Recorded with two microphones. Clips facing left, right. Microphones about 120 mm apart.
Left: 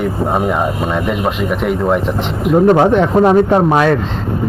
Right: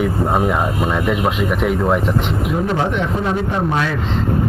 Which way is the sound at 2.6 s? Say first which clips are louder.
Left 12 dB; 50° left (ahead or behind).